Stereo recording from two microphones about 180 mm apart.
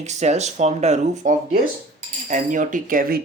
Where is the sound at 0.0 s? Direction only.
40° right (ahead or behind).